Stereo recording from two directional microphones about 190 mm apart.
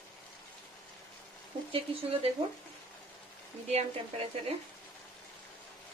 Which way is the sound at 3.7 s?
35° right (ahead or behind).